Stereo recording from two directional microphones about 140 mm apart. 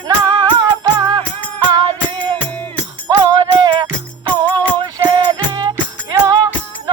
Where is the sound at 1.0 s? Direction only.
30° right (ahead or behind).